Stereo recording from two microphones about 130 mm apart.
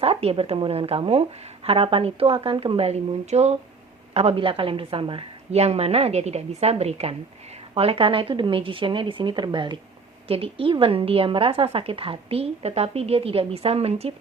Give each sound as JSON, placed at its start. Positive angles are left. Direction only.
{"t": 0.0, "sound": "a woman's voice", "side_deg": -50}